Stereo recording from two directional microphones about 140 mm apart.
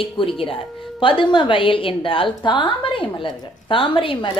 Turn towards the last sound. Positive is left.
turn(degrees=40)  # may be behind; listen again after turning